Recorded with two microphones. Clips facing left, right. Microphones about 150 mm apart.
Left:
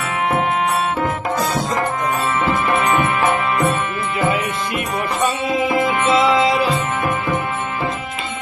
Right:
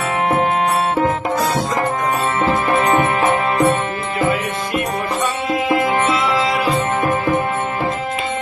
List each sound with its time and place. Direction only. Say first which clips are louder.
2.4 s music: right 3 dB; 35° right (ahead or behind)
6.3 s music: left 2 dB; 25° left (ahead or behind)